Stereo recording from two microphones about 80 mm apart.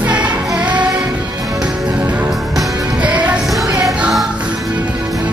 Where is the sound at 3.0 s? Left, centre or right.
Centre.